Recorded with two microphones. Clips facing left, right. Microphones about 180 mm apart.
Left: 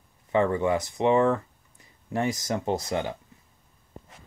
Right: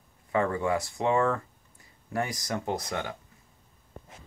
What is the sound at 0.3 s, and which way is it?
Speech, 25° left (ahead or behind).